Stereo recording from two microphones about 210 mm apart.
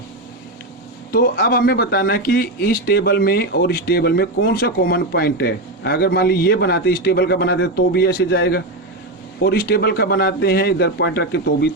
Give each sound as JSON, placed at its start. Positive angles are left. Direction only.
{"t": 1.1, "sound": "speech", "side_deg": 45}